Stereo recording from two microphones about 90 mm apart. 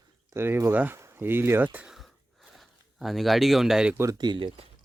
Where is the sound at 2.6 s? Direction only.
Centre (ahead or behind).